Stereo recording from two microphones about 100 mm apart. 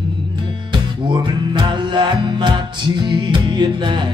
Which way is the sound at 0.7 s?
50° right (ahead or behind).